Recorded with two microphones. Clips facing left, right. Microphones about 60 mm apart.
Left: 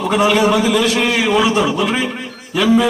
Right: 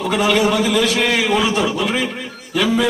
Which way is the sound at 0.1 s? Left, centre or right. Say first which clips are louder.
Left 3 dB; centre.